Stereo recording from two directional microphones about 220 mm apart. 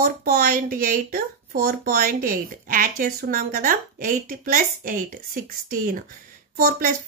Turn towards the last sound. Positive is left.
turn(degrees=-40)  # may be behind; listen again after turning